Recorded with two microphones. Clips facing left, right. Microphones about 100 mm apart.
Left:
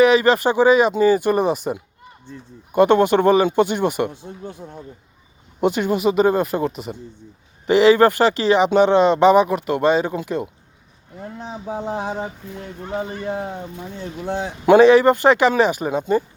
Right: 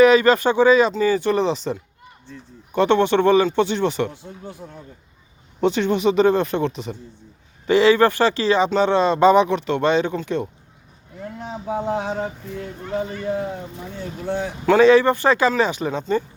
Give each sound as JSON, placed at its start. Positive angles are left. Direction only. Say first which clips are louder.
{"t": 0.0, "sound": "speech", "louder": "right 1 dB", "side_deg": 15}
{"t": 3.3, "sound": "speech", "louder": "left 1 dB", "side_deg": 15}
{"t": 5.5, "sound": "speech", "louder": "even", "side_deg": 10}
{"t": 7.7, "sound": "speech", "louder": "left 2 dB", "side_deg": 20}
{"t": 9.3, "sound": "speech", "louder": "left 1 dB", "side_deg": 5}
{"t": 11.2, "sound": "speech", "louder": "even", "side_deg": 30}
{"t": 11.9, "sound": "speech", "louder": "right 1 dB", "side_deg": 20}
{"t": 12.5, "sound": "speech", "louder": "right 1 dB", "side_deg": 30}
{"t": 14.3, "sound": "speech", "louder": "left 4 dB", "side_deg": 20}
{"t": 15.8, "sound": "speech", "louder": "left 2 dB", "side_deg": 10}